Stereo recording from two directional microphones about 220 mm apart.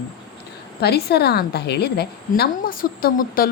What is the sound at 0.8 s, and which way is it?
A woman's voice, 45° left (ahead or behind).